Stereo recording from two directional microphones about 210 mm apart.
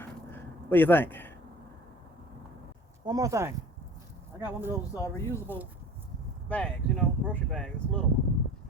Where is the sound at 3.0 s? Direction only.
15° right (ahead or behind).